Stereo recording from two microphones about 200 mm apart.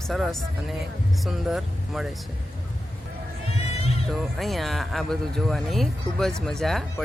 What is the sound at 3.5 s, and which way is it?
Music, 30° left (ahead or behind).